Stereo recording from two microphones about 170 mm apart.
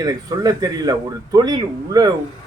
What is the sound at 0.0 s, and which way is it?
Speech, 20° right (ahead or behind).